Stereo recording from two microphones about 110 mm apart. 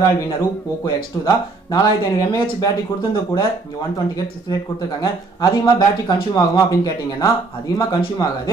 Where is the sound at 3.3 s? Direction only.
35° left (ahead or behind).